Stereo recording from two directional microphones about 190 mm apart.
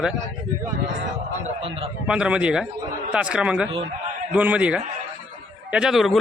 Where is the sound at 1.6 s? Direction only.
30° right (ahead or behind).